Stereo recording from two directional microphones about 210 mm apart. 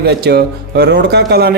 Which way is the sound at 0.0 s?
50° right (ahead or behind).